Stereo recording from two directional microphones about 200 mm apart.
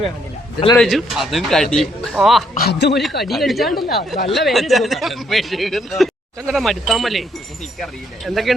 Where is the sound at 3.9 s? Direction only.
50° left (ahead or behind).